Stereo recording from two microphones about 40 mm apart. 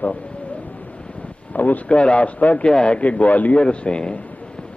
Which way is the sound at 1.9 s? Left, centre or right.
Left.